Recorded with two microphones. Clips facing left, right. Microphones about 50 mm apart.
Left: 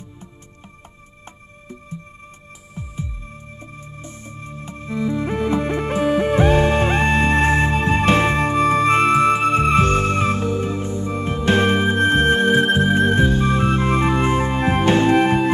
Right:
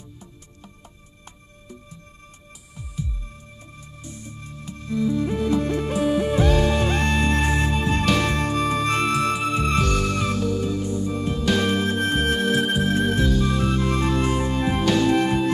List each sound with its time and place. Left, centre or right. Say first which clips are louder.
3.8 s music: left 3 dB; left